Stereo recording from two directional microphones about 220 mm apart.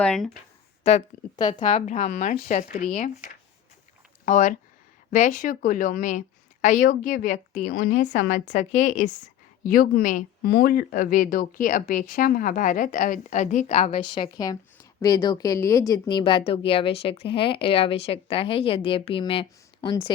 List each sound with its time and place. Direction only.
0.0 s speech: 5° left (ahead or behind)
0.9 s speech: 25° left (ahead or behind)
1.6 s a woman's voice: 30° left (ahead or behind)